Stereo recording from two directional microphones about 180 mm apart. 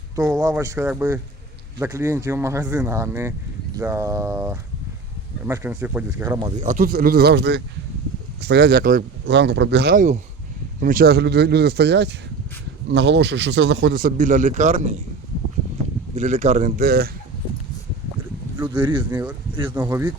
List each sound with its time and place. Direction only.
0.2 s speech: 20° right (ahead or behind)
6.6 s speech: 45° right (ahead or behind); by 10.0 s 65° right (ahead or behind)
10.8 s speech: 50° right (ahead or behind); by 13.9 s 75° right (ahead or behind)
13.9 s a man's voice: 50° right (ahead or behind)
16.1 s speech: 40° right (ahead or behind)
18.7 s speech: 25° right (ahead or behind)
19.7 s speech: 10° right (ahead or behind)